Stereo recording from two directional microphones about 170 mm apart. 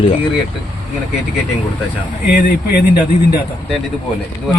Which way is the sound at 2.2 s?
55° left (ahead or behind).